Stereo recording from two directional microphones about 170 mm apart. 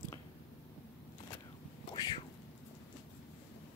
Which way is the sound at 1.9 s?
25° left (ahead or behind).